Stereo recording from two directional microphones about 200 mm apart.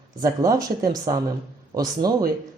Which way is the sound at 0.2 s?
15° right (ahead or behind).